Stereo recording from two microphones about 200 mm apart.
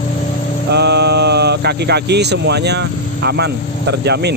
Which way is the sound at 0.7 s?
55° right (ahead or behind).